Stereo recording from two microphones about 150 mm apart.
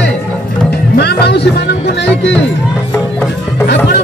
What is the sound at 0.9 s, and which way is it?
Music, 90° left.